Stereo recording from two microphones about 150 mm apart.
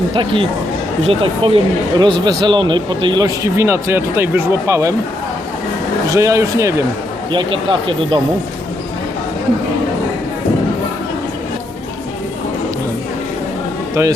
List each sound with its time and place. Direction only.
0.1 s speech: 35° right (ahead or behind)
6.1 s speech: 20° right (ahead or behind)
7.3 s speech: 35° right (ahead or behind)